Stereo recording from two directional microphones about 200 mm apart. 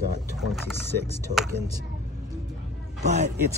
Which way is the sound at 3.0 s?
35° right (ahead or behind).